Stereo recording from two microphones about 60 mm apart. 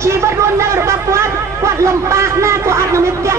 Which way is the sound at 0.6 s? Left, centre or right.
Right.